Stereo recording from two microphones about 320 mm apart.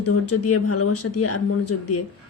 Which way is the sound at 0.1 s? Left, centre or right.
Left.